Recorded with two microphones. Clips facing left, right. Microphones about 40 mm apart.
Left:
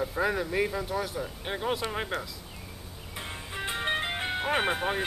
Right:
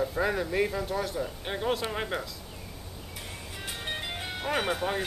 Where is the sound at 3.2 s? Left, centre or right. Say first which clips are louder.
Left 6 dB; left.